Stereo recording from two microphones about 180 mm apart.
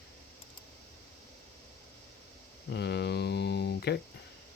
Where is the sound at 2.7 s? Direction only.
70° left (ahead or behind).